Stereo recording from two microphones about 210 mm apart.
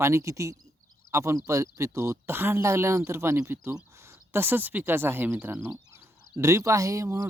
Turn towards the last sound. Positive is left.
turn(degrees=-15)  # may be behind; listen again after turning